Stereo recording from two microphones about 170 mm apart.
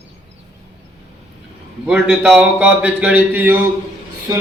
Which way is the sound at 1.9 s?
5° right (ahead or behind).